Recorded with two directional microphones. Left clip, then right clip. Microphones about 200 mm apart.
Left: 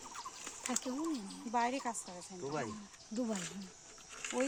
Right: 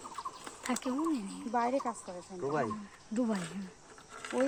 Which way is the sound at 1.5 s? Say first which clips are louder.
Right 3 dB; 50° left (ahead or behind).